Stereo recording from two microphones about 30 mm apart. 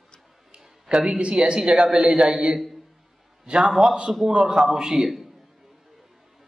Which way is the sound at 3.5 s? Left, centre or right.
Right.